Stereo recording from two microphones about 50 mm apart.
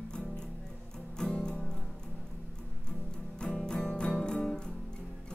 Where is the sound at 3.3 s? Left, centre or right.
Centre.